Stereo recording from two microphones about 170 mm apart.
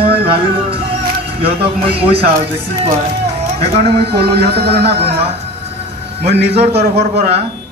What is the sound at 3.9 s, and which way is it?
Music, 70° right (ahead or behind).